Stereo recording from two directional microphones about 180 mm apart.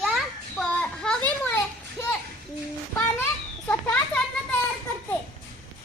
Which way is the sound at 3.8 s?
5° left (ahead or behind).